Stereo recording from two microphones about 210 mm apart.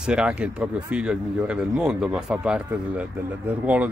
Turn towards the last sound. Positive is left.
turn(degrees=-5)  # may be behind; listen again after turning